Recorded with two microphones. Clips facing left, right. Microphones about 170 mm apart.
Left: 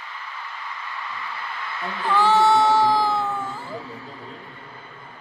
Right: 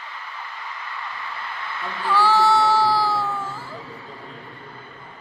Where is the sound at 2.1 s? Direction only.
20° left (ahead or behind).